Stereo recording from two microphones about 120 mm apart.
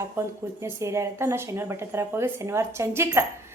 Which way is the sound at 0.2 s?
20° right (ahead or behind).